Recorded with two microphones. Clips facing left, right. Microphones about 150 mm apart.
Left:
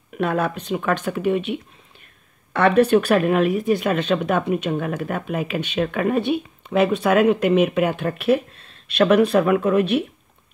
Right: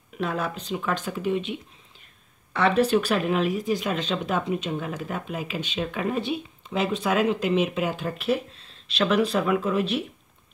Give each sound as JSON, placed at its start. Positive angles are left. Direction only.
{"t": 0.2, "sound": "speech", "side_deg": 60}